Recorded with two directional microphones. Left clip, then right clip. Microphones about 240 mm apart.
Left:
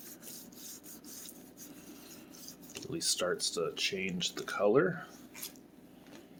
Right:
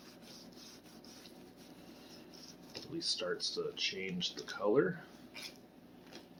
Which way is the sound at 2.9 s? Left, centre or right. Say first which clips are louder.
Left 4 dB; left.